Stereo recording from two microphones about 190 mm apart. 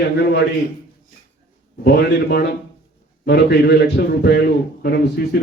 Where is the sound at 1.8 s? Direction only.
60° left (ahead or behind).